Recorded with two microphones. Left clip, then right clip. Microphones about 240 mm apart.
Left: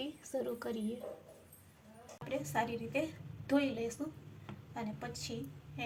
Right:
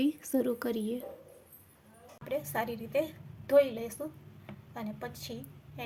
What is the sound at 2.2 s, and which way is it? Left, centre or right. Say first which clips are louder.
A woman's voice: right 3 dB; right.